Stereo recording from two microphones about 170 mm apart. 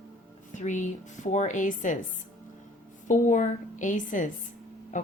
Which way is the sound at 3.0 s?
45° left (ahead or behind).